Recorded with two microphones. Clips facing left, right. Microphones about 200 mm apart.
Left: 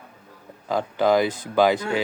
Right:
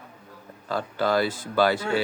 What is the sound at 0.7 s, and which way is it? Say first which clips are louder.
Speech: left 5 dB; 15° left (ahead or behind).